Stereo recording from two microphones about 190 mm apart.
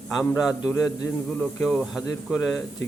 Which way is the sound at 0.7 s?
10° left (ahead or behind).